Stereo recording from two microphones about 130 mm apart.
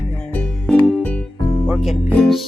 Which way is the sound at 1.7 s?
Centre (ahead or behind).